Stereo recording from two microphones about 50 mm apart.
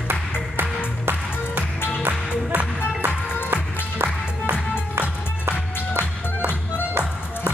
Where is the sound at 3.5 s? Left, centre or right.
Right.